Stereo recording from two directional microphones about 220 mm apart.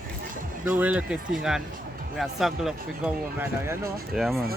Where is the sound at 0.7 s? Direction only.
5° right (ahead or behind).